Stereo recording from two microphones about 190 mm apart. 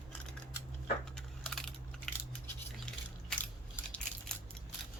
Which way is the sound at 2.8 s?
5° left (ahead or behind).